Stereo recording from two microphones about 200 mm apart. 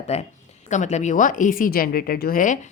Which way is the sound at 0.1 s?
35° left (ahead or behind).